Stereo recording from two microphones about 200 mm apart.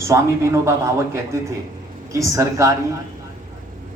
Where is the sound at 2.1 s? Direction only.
15° right (ahead or behind).